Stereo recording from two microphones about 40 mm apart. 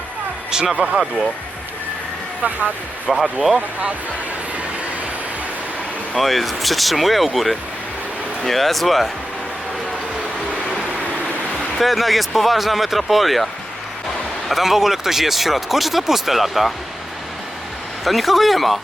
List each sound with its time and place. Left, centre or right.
0.5 s speech: centre
2.4 s speech: right
3.1 s speech: centre
6.1 s speech: centre
11.8 s speech: centre
18.0 s speech: centre